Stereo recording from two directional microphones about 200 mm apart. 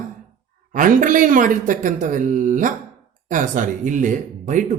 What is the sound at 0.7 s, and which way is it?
Speech, 40° right (ahead or behind).